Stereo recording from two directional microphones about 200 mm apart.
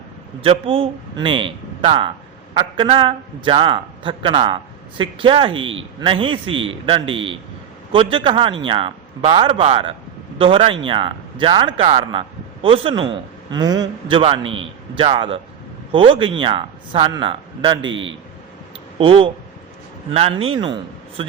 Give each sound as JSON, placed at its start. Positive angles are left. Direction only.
{"t": 0.4, "sound": "a man's voice", "side_deg": -30}
{"t": 17.8, "sound": "a man's voice", "side_deg": -75}
{"t": 18.9, "sound": "a man's voice", "side_deg": -25}